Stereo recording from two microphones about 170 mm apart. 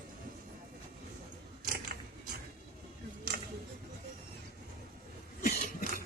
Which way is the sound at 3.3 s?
65° right (ahead or behind).